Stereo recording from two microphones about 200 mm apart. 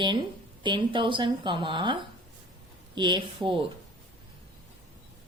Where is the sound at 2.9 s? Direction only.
25° right (ahead or behind).